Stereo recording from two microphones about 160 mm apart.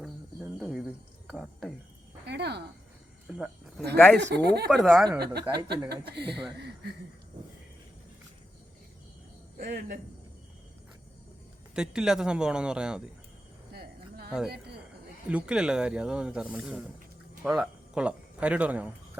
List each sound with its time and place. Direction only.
0.0 s a sound: centre (ahead or behind)
2.2 s a sound: 90° right
3.2 s speech: 5° right (ahead or behind)
3.9 s speech: 10° left (ahead or behind)
4.2 s speech: 90° right
4.7 s speech: centre (ahead or behind)
5.4 s speech: 30° right (ahead or behind)
5.9 s speech: 90° right
9.6 s speech: 65° right (ahead or behind)
11.7 s speech: 5° right (ahead or behind)
15.3 s a man's voice: 5° right (ahead or behind)